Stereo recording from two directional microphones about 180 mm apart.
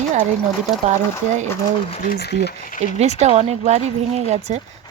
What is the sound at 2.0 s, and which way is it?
Speech, 60° left (ahead or behind).